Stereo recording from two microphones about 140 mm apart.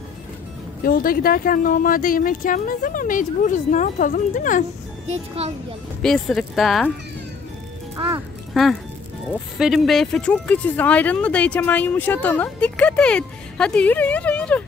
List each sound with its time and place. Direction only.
0.8 s speech: 90° left; by 4.6 s 65° left (ahead or behind)
6.0 s speech: 5° left (ahead or behind)
8.5 s speech: centre (ahead or behind)